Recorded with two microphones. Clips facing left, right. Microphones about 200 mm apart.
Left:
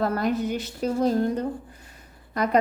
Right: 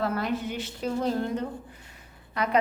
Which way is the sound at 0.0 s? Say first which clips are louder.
Left 4 dB; 45° left (ahead or behind).